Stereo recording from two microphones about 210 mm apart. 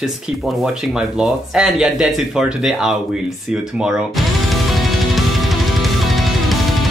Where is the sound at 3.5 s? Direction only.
5° right (ahead or behind).